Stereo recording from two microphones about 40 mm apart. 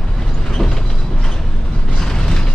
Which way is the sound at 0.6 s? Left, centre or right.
Centre.